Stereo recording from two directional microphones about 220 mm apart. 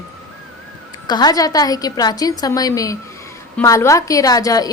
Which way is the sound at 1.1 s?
20° left (ahead or behind).